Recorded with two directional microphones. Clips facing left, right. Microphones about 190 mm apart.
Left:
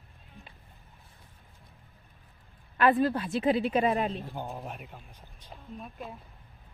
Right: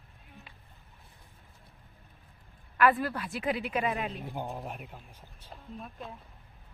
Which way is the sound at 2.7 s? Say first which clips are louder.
Left 2 dB; 25° left (ahead or behind).